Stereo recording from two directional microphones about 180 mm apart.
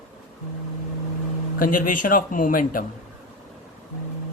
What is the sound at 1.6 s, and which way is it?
Speech, 50° left (ahead or behind).